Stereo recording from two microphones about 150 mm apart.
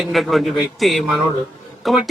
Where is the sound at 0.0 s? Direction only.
Centre (ahead or behind).